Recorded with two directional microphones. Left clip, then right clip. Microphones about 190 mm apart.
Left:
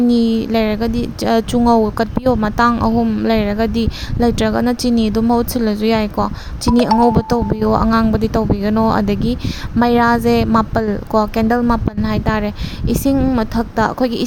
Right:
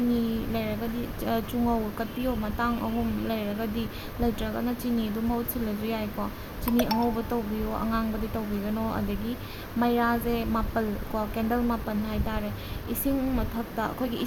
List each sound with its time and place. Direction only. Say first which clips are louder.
0.1 s a woman's voice: left 13 dB; 55° left (ahead or behind)